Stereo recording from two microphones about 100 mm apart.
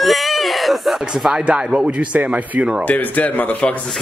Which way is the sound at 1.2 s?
10° right (ahead or behind).